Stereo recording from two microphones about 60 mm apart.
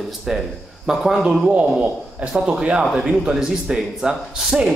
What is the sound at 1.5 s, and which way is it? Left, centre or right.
Speech, right.